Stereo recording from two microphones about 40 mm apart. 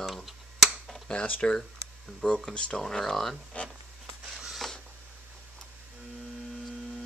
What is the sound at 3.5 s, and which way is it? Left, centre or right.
Speech, left.